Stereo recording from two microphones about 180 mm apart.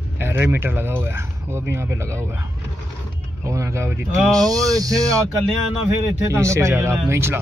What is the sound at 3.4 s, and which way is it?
Speech, 15° right (ahead or behind).